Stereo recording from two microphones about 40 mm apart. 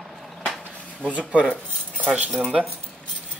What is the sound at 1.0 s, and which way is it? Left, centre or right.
Speech, right.